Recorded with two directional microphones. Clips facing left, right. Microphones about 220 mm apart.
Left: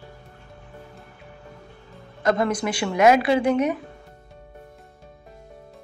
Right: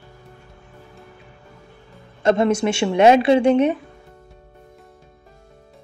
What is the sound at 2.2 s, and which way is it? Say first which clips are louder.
Speech: right 5 dB; 25° right (ahead or behind).